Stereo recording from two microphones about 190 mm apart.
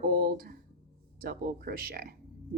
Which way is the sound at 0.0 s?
50° right (ahead or behind).